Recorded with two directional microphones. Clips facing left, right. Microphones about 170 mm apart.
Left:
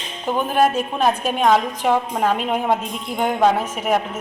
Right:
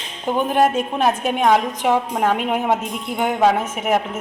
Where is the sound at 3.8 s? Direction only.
5° right (ahead or behind).